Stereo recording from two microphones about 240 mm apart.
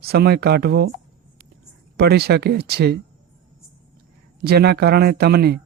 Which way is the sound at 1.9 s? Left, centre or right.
Right.